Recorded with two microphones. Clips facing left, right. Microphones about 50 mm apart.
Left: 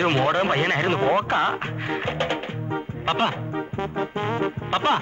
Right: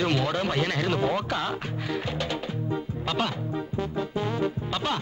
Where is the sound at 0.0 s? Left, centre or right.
Left.